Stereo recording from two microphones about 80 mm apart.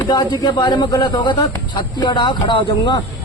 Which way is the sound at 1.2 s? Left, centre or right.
Left.